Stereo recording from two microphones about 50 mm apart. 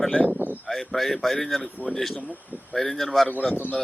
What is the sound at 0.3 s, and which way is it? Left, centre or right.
Speech, right.